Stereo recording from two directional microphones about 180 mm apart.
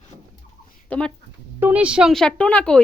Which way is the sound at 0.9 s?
5° left (ahead or behind).